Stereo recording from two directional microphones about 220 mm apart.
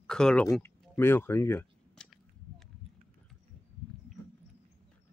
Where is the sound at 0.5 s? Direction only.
10° left (ahead or behind).